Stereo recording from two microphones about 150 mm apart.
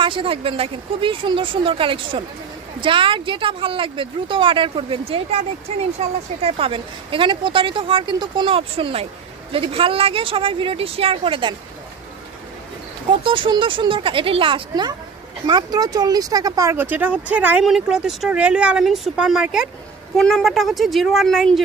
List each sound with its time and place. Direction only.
0.0 s speech: 35° right (ahead or behind)
13.1 s speech: 35° right (ahead or behind); by 21.6 s centre (ahead or behind)